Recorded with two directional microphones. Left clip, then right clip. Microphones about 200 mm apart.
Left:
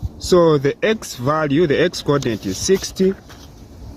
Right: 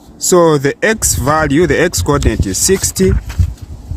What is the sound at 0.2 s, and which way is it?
Speech, 35° right (ahead or behind).